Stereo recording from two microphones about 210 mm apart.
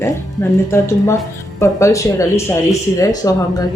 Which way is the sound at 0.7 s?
15° left (ahead or behind).